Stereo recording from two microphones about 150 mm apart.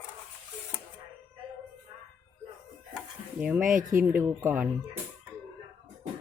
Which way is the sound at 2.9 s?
10° right (ahead or behind).